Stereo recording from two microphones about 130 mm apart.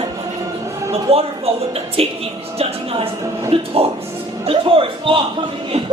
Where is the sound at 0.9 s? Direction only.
50° right (ahead or behind).